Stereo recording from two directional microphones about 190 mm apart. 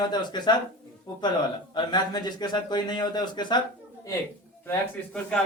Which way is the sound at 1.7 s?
20° left (ahead or behind).